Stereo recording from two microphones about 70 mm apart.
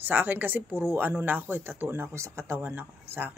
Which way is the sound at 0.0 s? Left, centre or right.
Right.